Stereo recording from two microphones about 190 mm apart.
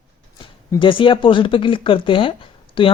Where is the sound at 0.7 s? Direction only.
25° left (ahead or behind).